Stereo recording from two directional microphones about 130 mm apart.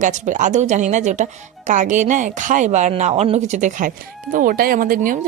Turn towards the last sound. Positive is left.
turn(degrees=-80)